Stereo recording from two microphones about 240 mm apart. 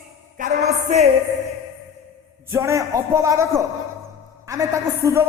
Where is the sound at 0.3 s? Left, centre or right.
Right.